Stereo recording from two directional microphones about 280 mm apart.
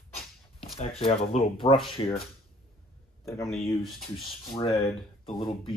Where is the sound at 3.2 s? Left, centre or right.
Centre.